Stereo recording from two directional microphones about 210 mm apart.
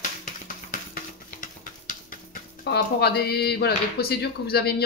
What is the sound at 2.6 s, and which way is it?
Speech, 50° left (ahead or behind).